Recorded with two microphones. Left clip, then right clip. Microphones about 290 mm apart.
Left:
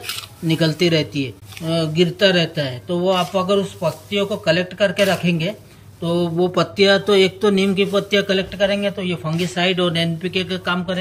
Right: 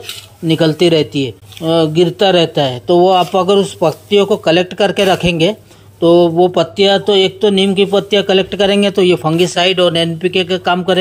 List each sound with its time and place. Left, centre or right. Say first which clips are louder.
0.5 s speech: right 7 dB; centre